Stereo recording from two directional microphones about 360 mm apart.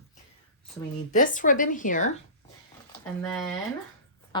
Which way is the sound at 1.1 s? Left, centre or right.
Left.